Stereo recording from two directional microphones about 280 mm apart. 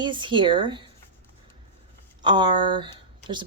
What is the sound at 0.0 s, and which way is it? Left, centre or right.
Speech, centre.